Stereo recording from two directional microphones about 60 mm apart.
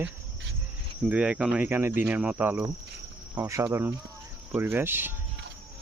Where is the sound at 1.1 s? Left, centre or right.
Right.